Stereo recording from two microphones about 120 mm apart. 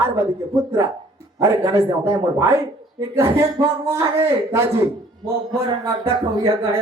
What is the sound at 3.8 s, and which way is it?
Speech, 20° right (ahead or behind).